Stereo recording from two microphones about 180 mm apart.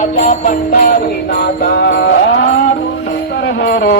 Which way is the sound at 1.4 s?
65° left (ahead or behind).